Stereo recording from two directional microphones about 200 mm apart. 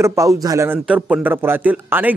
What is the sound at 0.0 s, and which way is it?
A man's voice, 15° right (ahead or behind).